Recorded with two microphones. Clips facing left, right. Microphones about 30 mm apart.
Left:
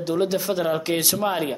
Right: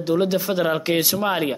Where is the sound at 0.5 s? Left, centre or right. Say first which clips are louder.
Right 3 dB; centre.